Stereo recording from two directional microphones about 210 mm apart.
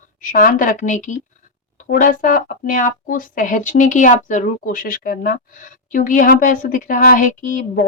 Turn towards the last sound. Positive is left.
turn(degrees=40)  # may be behind; listen again after turning